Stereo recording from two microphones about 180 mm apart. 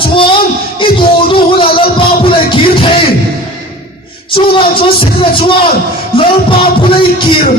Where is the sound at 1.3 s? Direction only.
30° left (ahead or behind).